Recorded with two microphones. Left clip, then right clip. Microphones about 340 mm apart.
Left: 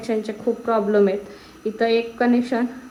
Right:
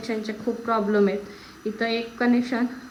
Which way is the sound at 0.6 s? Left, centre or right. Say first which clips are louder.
Left 4 dB; left.